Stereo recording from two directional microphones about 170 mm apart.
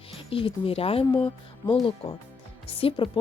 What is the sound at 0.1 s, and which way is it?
Speech, 35° left (ahead or behind).